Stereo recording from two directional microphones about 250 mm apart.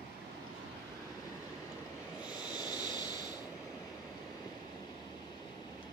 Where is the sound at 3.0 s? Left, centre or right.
Centre.